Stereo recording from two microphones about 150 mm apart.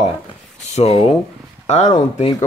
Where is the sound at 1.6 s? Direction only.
50° left (ahead or behind).